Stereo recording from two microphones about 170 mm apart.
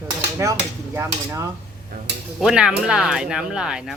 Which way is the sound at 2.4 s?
5° right (ahead or behind).